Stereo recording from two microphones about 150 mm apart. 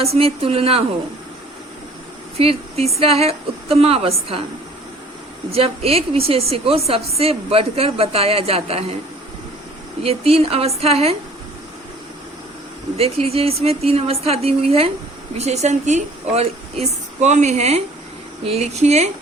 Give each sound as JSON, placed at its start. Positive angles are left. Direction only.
{"t": 0.0, "sound": "a woman's voice", "side_deg": -40}
{"t": 2.4, "sound": "a woman's voice", "side_deg": -40}
{"t": 5.5, "sound": "a woman's voice", "side_deg": -40}
{"t": 10.0, "sound": "a woman's voice", "side_deg": -40}
{"t": 13.0, "sound": "a woman's voice", "side_deg": -40}